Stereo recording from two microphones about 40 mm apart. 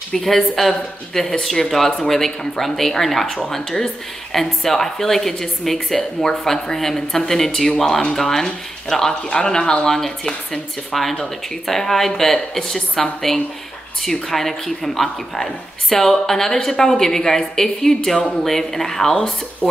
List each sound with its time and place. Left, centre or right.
0.1 s a woman's voice: centre